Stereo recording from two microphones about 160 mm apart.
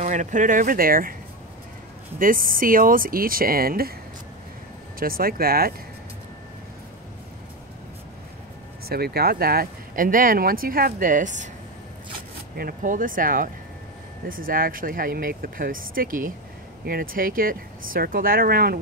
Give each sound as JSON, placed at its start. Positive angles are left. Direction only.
{"t": 0.0, "sound": "speech", "side_deg": -50}
{"t": 2.1, "sound": "speech", "side_deg": -60}
{"t": 4.9, "sound": "speech", "side_deg": -65}
{"t": 8.8, "sound": "speech", "side_deg": -75}
{"t": 12.5, "sound": "speech", "side_deg": -60}